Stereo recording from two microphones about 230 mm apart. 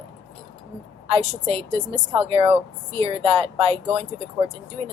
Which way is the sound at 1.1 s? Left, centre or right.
Right.